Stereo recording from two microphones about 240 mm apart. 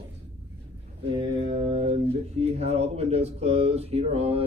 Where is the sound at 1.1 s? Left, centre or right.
Right.